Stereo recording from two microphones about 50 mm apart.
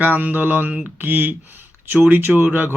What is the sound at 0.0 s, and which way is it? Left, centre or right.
Speech, right.